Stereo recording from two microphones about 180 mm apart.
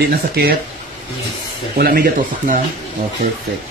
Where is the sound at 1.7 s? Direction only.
55° right (ahead or behind).